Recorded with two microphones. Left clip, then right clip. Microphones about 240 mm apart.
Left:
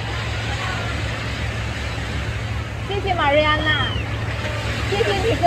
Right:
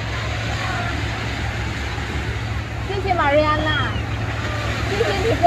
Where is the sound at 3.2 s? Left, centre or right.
Centre.